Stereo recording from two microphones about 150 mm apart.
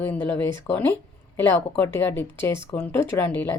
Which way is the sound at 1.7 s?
15° left (ahead or behind).